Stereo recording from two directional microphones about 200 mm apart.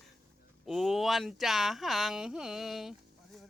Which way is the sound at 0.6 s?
Centre (ahead or behind).